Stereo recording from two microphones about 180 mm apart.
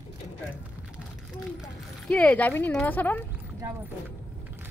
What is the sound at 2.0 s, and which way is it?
Speech, 5° left (ahead or behind).